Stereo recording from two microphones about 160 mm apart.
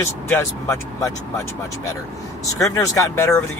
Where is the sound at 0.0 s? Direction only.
15° left (ahead or behind).